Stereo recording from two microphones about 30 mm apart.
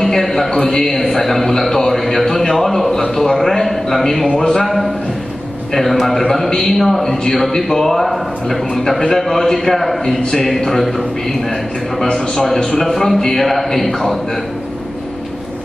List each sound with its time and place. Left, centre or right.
0.0 s a sound: centre
0.7 s a man's voice: centre
1.6 s a sound: centre
3.3 s a man's voice: centre
4.6 s a man's voice: centre
12.0 s a man's voice: centre